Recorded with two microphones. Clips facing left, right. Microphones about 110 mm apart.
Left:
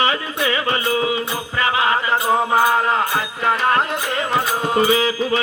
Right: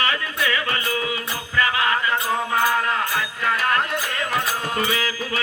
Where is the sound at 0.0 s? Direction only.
20° left (ahead or behind).